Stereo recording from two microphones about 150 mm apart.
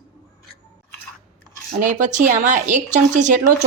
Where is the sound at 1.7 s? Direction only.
60° right (ahead or behind).